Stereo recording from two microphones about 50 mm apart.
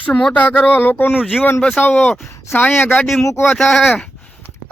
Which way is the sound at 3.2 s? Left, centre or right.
Left.